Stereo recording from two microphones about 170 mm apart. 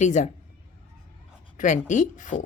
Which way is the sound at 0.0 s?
45° left (ahead or behind).